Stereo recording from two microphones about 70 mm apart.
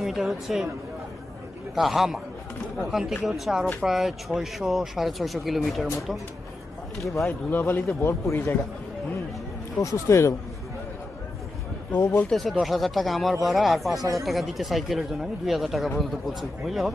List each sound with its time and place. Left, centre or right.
0.0 s speech: centre
1.8 s speech: centre
7.2 s speech: left
9.8 s speech: left
12.3 s speech: centre